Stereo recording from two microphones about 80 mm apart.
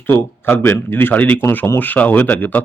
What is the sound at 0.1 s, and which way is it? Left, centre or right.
Speech, left.